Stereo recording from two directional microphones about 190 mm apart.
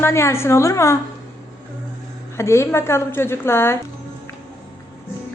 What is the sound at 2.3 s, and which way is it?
A woman's voice, 15° left (ahead or behind).